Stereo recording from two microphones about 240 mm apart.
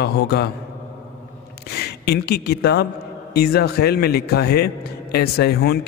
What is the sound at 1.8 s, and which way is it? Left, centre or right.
A man's voice, left.